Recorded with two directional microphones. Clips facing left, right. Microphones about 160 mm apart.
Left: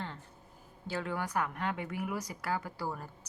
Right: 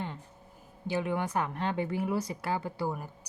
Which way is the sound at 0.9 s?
20° right (ahead or behind).